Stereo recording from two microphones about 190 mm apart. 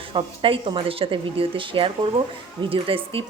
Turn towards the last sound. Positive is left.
turn(degrees=-30)  # may be behind; listen again after turning